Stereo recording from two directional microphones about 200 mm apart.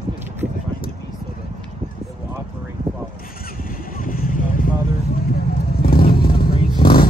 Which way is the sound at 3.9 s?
40° left (ahead or behind).